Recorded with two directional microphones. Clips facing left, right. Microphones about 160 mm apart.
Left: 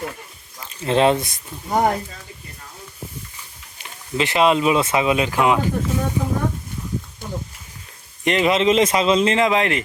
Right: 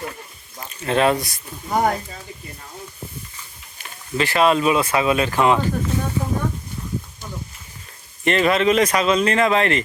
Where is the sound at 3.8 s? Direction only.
20° left (ahead or behind).